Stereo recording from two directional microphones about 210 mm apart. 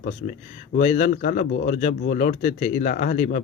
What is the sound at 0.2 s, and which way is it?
Speech, 35° left (ahead or behind).